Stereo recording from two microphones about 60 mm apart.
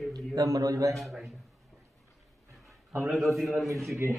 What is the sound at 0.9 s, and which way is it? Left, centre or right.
Speech, centre.